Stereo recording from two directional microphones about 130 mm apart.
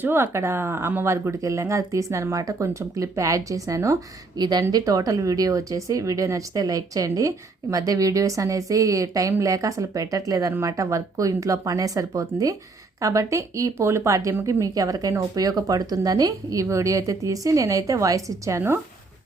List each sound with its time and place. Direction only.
0.0 s speech: 20° right (ahead or behind)